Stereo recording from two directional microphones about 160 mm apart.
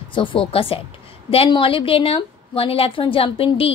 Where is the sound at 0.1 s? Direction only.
30° left (ahead or behind).